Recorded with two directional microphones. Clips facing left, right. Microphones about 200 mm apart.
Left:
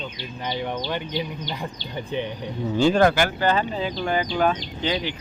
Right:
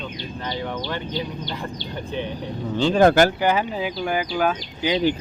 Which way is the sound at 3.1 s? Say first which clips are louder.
Right 6 dB; 45° right (ahead or behind).